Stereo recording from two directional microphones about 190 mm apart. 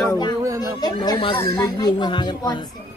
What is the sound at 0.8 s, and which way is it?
A child's voice, 20° left (ahead or behind).